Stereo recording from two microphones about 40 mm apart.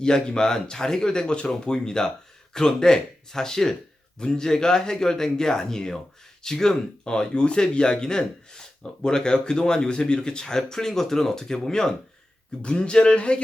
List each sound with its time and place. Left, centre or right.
0.0 s speech: centre